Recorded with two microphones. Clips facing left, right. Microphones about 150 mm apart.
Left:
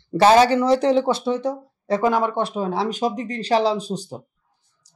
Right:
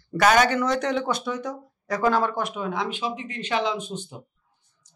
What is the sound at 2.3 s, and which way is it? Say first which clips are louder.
A woman's voice: left 5 dB; 30° left (ahead or behind).